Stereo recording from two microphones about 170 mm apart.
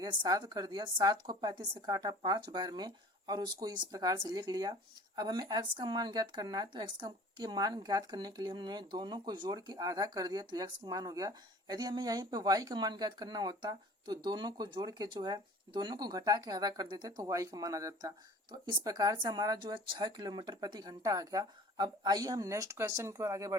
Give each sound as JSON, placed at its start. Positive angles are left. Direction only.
{"t": 0.0, "sound": "speech", "side_deg": -25}